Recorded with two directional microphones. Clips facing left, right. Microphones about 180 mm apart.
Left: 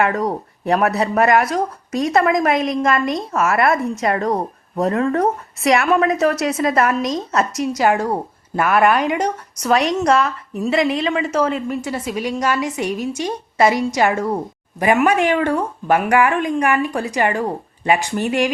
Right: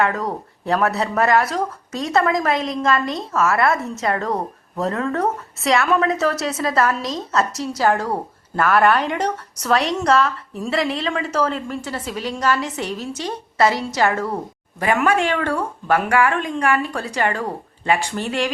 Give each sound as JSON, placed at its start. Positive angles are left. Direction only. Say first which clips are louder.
{"t": 0.1, "sound": "a woman's voice", "louder": "left 4 dB", "side_deg": 20}